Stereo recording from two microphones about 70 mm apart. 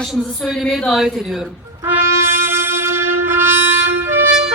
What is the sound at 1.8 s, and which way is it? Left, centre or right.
Brass instrument, right.